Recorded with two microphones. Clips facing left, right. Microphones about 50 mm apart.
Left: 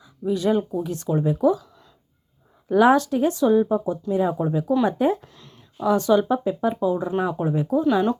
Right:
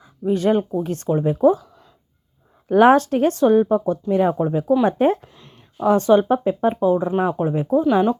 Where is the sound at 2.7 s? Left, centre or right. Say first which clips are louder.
Right 3 dB; right.